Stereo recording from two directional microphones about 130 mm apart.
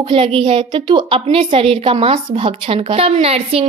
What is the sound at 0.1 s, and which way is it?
A woman's voice, 45° right (ahead or behind).